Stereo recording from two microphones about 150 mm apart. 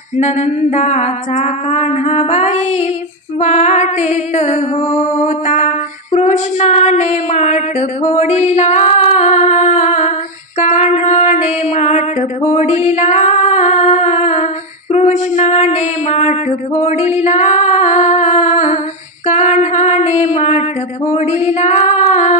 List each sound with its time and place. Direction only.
0.2 s a sound: 50° left (ahead or behind)
10.6 s mantra: 50° left (ahead or behind)
19.2 s female singing: 50° left (ahead or behind)